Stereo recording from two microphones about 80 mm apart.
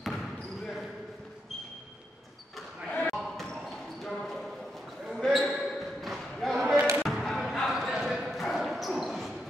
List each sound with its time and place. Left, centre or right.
0.0 s basketball bounce: centre
2.9 s basketball bounce: centre
4.0 s a sound: centre
5.0 s basketball bounce: centre